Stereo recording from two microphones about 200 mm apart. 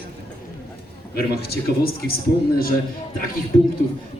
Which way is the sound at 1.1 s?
50° left (ahead or behind).